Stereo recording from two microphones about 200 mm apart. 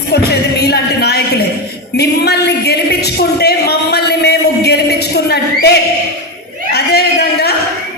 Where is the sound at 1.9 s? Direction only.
55° left (ahead or behind).